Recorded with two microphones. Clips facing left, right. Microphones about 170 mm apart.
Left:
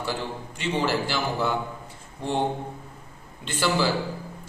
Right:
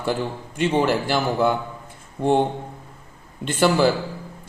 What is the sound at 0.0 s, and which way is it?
A man's voice, 50° right (ahead or behind).